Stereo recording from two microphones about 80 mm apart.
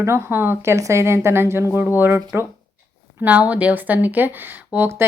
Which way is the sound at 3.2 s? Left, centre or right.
Centre.